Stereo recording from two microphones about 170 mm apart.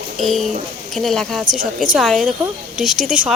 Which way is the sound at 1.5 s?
50° right (ahead or behind).